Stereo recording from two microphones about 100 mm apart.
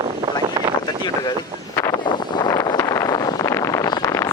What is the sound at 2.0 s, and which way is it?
Vehicle, 45° left (ahead or behind).